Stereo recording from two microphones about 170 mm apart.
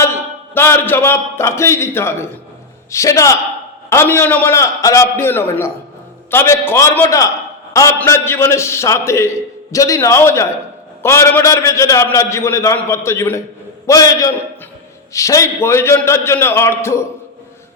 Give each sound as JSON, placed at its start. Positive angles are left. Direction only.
{"t": 0.0, "sound": "a man's voice", "side_deg": 15}